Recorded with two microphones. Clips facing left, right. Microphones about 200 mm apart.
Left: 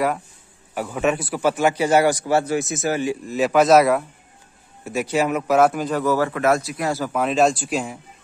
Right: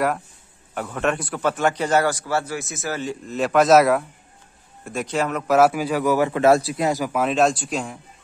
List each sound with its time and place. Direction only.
0.7 s a man's voice: 5° left (ahead or behind)
5.6 s speech: 5° right (ahead or behind)
6.4 s a man's voice: 30° right (ahead or behind)
7.1 s a man's voice: centre (ahead or behind)